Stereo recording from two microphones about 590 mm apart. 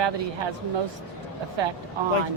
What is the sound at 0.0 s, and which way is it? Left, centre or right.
Speech, right.